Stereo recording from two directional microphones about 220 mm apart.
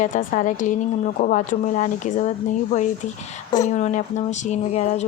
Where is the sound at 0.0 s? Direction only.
35° left (ahead or behind).